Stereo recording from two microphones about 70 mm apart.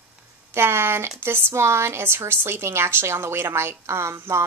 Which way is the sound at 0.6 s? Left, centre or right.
Right.